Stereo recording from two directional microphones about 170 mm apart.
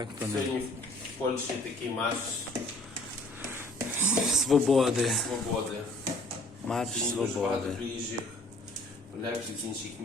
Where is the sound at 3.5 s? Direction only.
15° right (ahead or behind).